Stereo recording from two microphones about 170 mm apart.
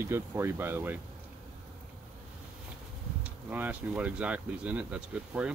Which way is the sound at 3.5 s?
10° right (ahead or behind).